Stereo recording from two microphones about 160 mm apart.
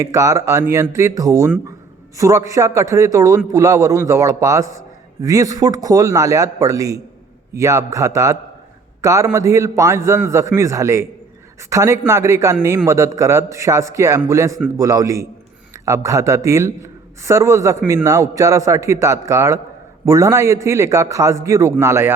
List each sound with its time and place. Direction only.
0.0 s a man's voice: 20° right (ahead or behind)